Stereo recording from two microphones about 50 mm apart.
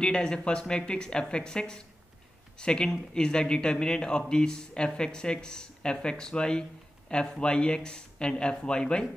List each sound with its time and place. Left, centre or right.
0.0 s speech: centre